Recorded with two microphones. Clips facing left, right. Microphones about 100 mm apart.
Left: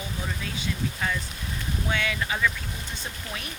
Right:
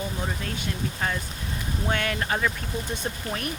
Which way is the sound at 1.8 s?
45° right (ahead or behind).